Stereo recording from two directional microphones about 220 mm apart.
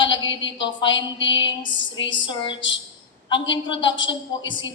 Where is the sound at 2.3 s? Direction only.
20° left (ahead or behind).